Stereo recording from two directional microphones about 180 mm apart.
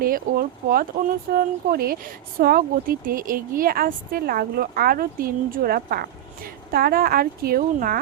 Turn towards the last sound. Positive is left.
turn(degrees=-50)  # may be behind; listen again after turning